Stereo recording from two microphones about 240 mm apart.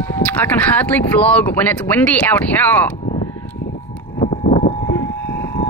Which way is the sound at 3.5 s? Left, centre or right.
Left.